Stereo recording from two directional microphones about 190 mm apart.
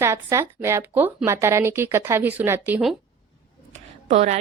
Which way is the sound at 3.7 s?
35° right (ahead or behind).